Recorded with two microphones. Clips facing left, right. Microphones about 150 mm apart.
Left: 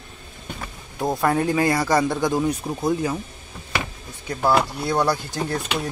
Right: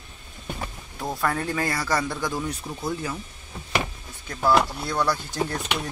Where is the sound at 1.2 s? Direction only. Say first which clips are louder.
Left 6 dB; 20° left (ahead or behind).